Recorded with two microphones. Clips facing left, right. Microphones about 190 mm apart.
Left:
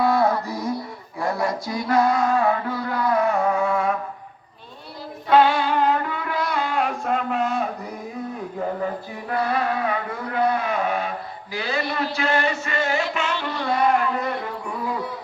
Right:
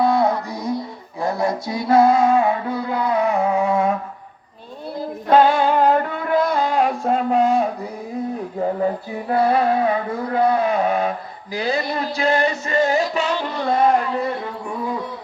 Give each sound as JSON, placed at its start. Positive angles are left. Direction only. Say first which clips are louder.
{"t": 0.0, "sound": "music", "louder": "right 2 dB", "side_deg": -20}
{"t": 4.9, "sound": "music", "louder": "right 2 dB", "side_deg": -45}
{"t": 9.3, "sound": "music", "louder": "right 6 dB", "side_deg": -30}
{"t": 13.6, "sound": "a child's voice", "louder": "right 4 dB", "side_deg": -25}
{"t": 13.8, "sound": "speech", "louder": "right 1 dB", "side_deg": -40}